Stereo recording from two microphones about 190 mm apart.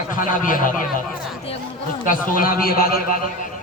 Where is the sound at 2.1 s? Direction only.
45° left (ahead or behind).